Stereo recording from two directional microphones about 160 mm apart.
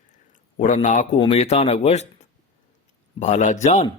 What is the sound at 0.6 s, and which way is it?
A man's voice, 50° left (ahead or behind).